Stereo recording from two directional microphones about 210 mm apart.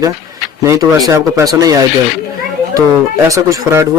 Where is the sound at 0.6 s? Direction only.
15° right (ahead or behind).